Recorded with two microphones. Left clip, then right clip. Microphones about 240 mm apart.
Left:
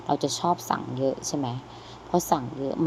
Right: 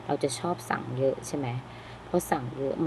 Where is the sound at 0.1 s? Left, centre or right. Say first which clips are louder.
Left 4 dB; centre.